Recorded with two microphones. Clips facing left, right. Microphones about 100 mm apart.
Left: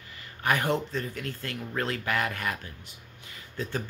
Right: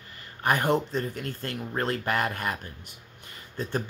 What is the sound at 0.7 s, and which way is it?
Speech, 20° right (ahead or behind).